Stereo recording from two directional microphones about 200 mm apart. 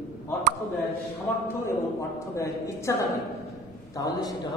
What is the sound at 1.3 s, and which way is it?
A man's voice, 10° left (ahead or behind).